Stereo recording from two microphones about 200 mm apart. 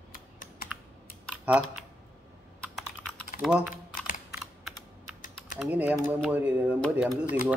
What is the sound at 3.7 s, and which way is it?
Typing, 45° left (ahead or behind).